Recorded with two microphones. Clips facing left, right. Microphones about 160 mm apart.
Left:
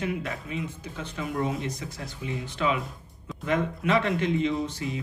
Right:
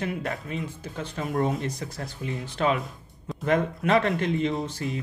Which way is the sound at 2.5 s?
45° right (ahead or behind).